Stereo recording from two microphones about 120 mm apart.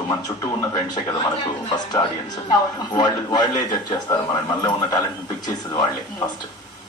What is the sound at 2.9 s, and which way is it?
Speech, 35° left (ahead or behind).